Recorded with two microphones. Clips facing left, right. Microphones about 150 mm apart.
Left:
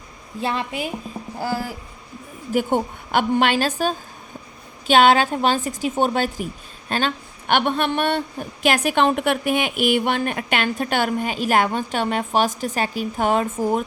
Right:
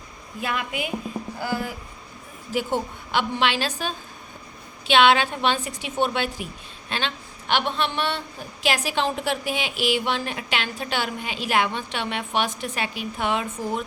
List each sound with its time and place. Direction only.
0.3 s a woman's voice: 30° left (ahead or behind)
2.5 s a woman's voice: 50° left (ahead or behind)